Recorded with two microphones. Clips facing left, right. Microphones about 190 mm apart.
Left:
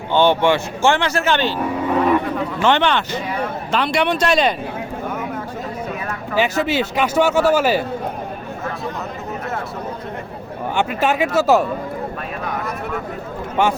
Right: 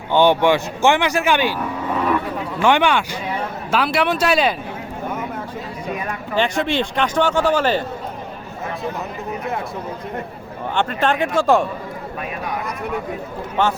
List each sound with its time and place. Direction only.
0.1 s speech: 15° right (ahead or behind)
2.6 s speech: 10° right (ahead or behind)
6.3 s speech: 5° left (ahead or behind)
10.8 s speech: 10° left (ahead or behind)
13.6 s speech: 10° left (ahead or behind)